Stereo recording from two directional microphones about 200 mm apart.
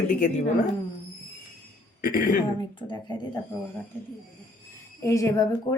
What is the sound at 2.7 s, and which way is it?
Speech, 20° left (ahead or behind).